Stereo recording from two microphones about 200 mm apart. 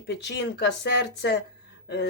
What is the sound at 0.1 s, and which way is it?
Speech, 60° left (ahead or behind).